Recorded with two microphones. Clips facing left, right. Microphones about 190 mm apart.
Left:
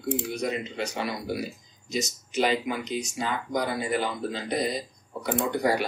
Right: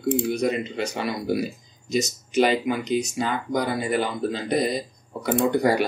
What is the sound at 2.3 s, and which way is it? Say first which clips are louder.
Speech: right 5 dB; 65° right (ahead or behind).